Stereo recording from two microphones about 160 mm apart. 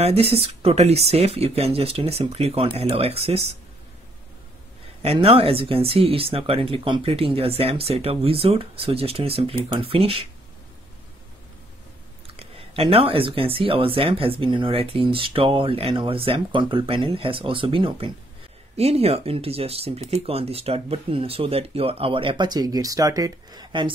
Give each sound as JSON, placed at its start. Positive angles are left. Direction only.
{"t": 0.0, "sound": "speech", "side_deg": -40}
{"t": 5.0, "sound": "speech", "side_deg": -40}
{"t": 12.3, "sound": "speech", "side_deg": -35}